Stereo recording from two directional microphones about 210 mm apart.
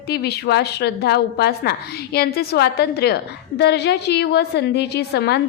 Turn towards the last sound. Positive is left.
turn(degrees=50)  # may be behind; listen again after turning